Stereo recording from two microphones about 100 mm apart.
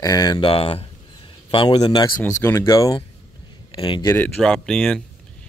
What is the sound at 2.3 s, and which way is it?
Speech, 30° left (ahead or behind).